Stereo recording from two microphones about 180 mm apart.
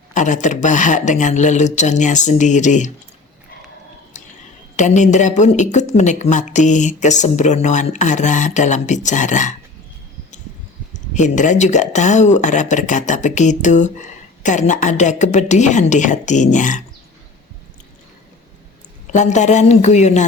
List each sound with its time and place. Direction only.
0.1 s speech: 45° left (ahead or behind)
4.8 s speech: 40° left (ahead or behind)
11.1 s speech: 40° left (ahead or behind)
19.1 s speech: 40° left (ahead or behind)